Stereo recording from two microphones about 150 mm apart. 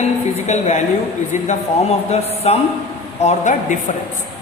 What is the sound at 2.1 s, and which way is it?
Speech, 45° left (ahead or behind).